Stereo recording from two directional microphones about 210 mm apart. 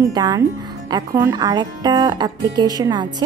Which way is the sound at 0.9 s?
15° right (ahead or behind).